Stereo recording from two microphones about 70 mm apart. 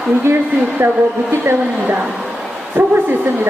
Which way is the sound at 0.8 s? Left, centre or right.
Right.